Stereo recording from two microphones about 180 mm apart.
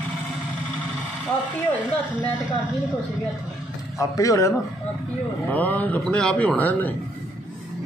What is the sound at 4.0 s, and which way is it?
Speech, 15° left (ahead or behind).